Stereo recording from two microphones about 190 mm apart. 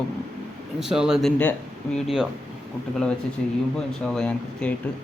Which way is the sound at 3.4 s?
5° left (ahead or behind).